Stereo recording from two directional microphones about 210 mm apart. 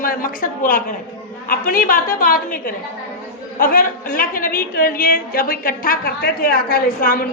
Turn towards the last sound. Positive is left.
turn(degrees=45)  # may be behind; listen again after turning